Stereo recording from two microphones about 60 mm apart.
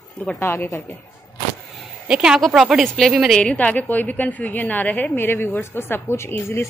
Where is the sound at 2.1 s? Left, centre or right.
Centre.